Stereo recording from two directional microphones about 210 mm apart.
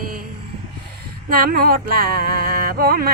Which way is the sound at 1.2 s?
45° right (ahead or behind).